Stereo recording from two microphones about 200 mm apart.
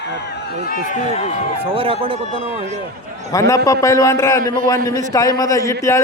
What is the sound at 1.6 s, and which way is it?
Speech, 25° right (ahead or behind).